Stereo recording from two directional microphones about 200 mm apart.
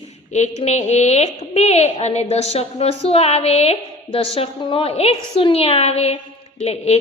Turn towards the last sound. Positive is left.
turn(degrees=30)  # may be behind; listen again after turning